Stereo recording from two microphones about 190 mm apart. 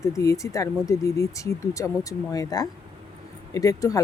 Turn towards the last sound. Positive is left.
turn(degrees=20)  # may be behind; listen again after turning